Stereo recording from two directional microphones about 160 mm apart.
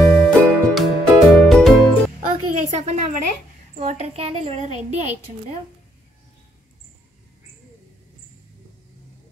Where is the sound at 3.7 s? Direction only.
45° right (ahead or behind).